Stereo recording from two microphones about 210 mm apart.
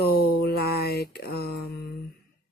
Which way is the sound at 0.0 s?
50° left (ahead or behind).